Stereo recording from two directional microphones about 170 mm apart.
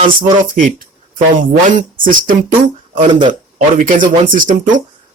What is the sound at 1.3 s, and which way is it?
Speech, 50° right (ahead or behind).